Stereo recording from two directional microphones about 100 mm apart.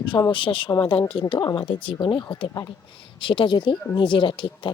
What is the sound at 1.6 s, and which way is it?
Speech, 60° left (ahead or behind).